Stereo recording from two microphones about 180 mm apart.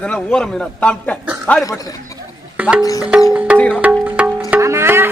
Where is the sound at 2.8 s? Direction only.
20° left (ahead or behind).